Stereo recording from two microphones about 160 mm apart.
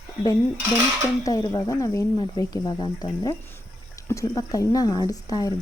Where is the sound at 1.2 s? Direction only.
20° left (ahead or behind).